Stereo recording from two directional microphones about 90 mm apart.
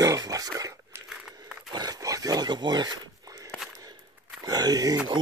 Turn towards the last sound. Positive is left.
turn(degrees=-55)  # may be behind; listen again after turning